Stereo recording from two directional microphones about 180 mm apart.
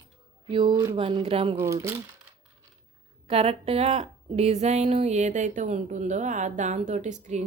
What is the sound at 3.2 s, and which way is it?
A woman's voice, 35° right (ahead or behind).